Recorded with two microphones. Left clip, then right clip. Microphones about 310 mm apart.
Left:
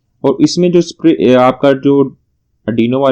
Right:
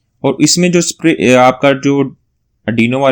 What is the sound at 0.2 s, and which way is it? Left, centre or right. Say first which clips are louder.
Speech: left 1 dB; right.